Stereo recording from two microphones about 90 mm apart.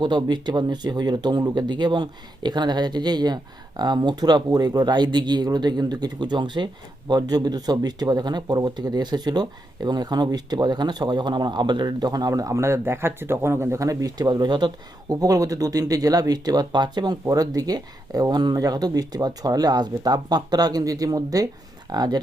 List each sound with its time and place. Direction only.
0.0 s speech: 55° right (ahead or behind)
15.1 s speech: 40° right (ahead or behind)